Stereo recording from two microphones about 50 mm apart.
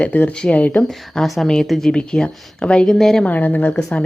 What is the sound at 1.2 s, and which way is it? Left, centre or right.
Speech, centre.